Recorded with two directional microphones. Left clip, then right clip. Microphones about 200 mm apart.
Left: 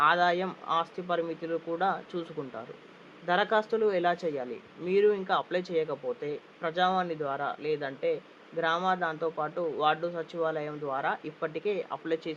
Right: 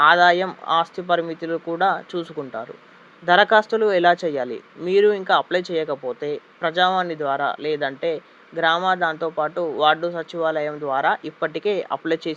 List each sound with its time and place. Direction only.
0.0 s speech: 30° right (ahead or behind)